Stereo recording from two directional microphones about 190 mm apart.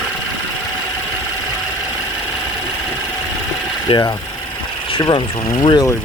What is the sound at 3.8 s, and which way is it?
Speech, 20° left (ahead or behind).